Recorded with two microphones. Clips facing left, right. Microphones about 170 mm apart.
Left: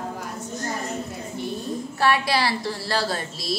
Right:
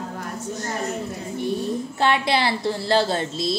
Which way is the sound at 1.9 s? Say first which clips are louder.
Even; 20° right (ahead or behind).